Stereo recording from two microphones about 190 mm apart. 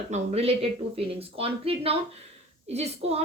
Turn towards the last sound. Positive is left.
turn(degrees=-35)  # may be behind; listen again after turning